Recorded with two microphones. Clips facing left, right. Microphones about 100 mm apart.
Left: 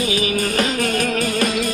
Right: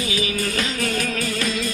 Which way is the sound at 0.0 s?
50° left (ahead or behind).